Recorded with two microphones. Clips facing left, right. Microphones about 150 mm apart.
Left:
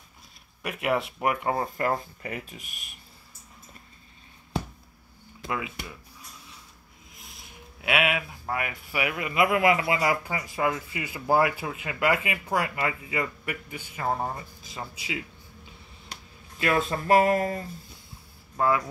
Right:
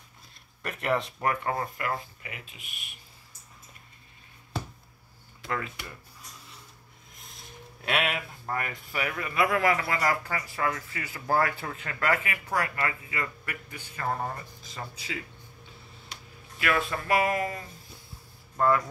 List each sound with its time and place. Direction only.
0.6 s speech: 5° left (ahead or behind)
1.8 s speech: 40° left (ahead or behind)
7.8 s speech: 10° left (ahead or behind)
16.5 s speech: 25° left (ahead or behind)
18.6 s speech: 10° left (ahead or behind)